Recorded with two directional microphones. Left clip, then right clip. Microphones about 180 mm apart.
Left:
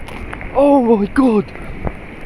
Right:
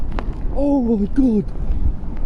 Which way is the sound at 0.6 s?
20° left (ahead or behind).